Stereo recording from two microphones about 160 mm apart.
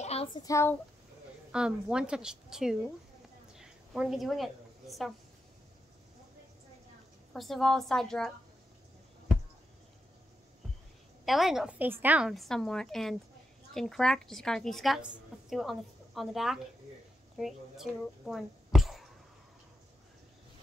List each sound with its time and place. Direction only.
0.0 s a sound: 40° left (ahead or behind)
0.4 s speech: 20° left (ahead or behind)
1.5 s a woman's voice: 5° right (ahead or behind)
3.5 s a sound: 5° right (ahead or behind)
7.3 s a woman's voice: centre (ahead or behind)
11.2 s a woman's voice: centre (ahead or behind)